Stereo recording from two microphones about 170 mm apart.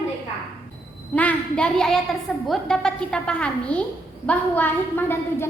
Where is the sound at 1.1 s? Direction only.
10° left (ahead or behind).